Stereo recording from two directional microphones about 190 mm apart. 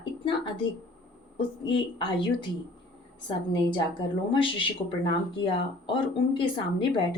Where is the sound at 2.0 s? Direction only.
25° left (ahead or behind).